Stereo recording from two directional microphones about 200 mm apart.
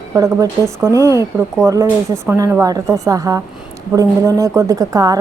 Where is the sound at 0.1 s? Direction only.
15° right (ahead or behind).